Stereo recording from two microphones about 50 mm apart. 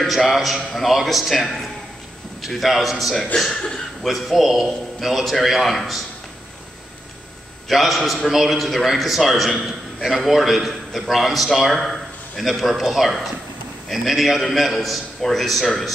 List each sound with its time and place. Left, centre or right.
0.1 s a man's voice: centre
3.5 s a man's voice: centre
4.0 s a man's voice: centre
7.6 s a man's voice: centre